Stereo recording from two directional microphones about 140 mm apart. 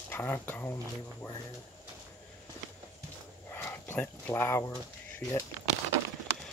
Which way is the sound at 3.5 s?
15° left (ahead or behind).